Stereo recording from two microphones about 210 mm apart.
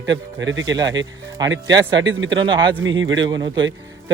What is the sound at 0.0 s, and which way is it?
Speech, 60° right (ahead or behind).